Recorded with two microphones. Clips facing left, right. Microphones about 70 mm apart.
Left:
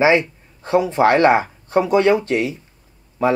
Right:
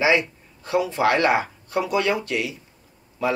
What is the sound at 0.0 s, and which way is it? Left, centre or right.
Speech, left.